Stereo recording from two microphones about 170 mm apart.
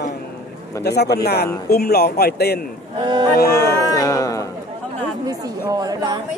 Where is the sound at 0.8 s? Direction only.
75° left (ahead or behind).